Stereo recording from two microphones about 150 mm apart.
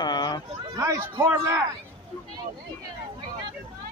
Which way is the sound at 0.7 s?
20° right (ahead or behind).